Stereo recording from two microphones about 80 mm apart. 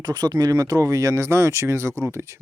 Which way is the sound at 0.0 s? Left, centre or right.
Right.